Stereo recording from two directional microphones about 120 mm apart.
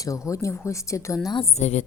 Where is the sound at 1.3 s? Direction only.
60° left (ahead or behind).